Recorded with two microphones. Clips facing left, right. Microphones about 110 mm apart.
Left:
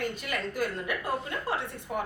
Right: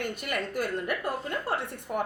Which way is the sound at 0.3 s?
55° right (ahead or behind).